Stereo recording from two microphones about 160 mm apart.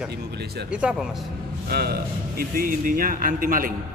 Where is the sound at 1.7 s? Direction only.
75° right (ahead or behind); by 3.7 s 60° right (ahead or behind).